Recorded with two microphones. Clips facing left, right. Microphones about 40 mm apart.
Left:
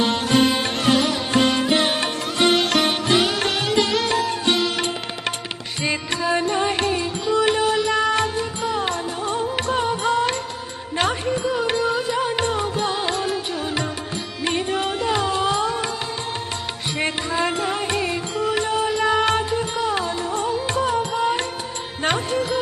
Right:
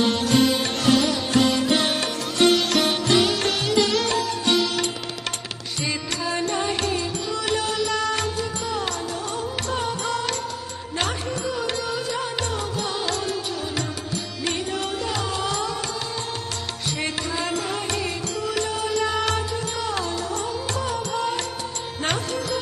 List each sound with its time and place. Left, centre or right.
0.0 s music: left
14.4 s music: left
17.0 s music: left